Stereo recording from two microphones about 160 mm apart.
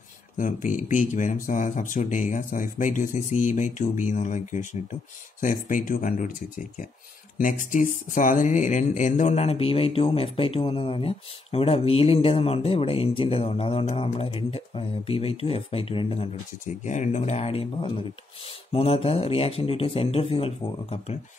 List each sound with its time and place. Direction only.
0.4 s speech: 55° left (ahead or behind)
7.3 s speech: 55° left (ahead or behind); by 16.3 s 35° left (ahead or behind)
16.6 s speech: 50° left (ahead or behind)